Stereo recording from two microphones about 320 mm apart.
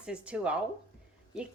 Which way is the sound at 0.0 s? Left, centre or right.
Centre.